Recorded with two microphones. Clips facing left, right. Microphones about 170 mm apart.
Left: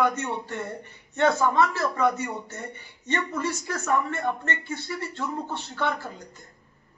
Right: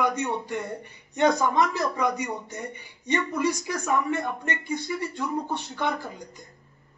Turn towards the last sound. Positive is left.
turn(degrees=-15)  # may be behind; listen again after turning